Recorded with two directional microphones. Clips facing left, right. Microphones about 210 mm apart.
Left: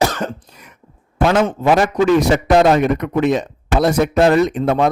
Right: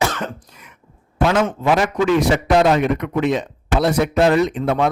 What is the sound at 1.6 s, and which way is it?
A man's voice, 40° left (ahead or behind).